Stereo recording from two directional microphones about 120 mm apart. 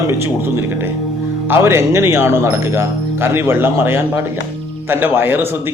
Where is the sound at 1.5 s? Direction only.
20° right (ahead or behind).